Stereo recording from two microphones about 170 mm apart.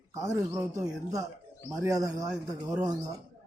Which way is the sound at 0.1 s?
20° right (ahead or behind).